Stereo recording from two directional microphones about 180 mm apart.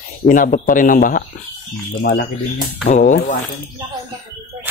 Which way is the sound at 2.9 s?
45° left (ahead or behind).